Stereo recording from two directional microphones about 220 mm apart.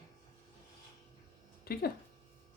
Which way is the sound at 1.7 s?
45° left (ahead or behind).